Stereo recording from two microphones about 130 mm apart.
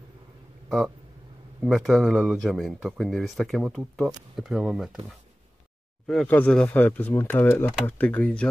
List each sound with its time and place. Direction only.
0.7 s speech: 5° right (ahead or behind)